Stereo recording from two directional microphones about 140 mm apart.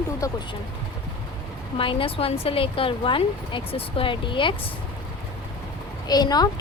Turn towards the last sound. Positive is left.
turn(degrees=30)  # may be behind; listen again after turning